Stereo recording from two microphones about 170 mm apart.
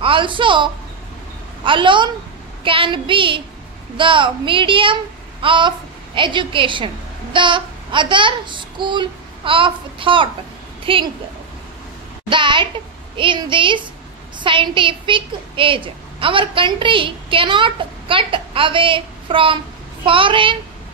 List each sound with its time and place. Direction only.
0.0 s a woman's voice: 30° right (ahead or behind)
12.3 s a woman's voice: 30° right (ahead or behind)